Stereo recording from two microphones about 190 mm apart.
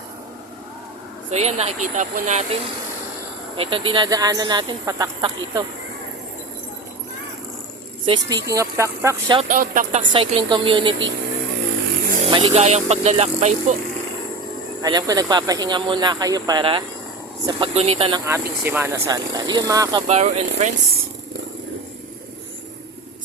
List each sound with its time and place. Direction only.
1.3 s speech: 35° right (ahead or behind); by 5.6 s 20° right (ahead or behind)
8.0 s speech: 25° right (ahead or behind)
9.4 s speech: 45° right (ahead or behind)
10.1 s speech: 25° right (ahead or behind)
12.2 s speech: 25° right (ahead or behind)
14.8 s speech: 20° right (ahead or behind)
18.3 s speech: 10° right (ahead or behind)
20.0 s speech: 35° right (ahead or behind)